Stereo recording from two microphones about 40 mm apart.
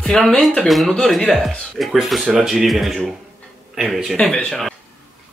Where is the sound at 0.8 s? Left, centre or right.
Centre.